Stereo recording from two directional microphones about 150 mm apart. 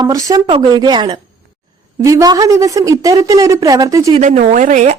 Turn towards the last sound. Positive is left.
turn(degrees=-55)  # may be behind; listen again after turning